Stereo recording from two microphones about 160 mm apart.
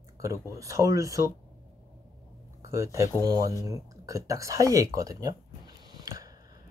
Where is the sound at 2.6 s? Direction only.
20° right (ahead or behind).